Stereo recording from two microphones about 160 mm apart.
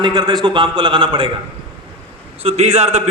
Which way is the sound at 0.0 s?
30° right (ahead or behind).